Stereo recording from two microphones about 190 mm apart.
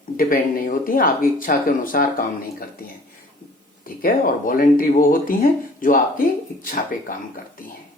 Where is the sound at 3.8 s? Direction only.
45° left (ahead or behind).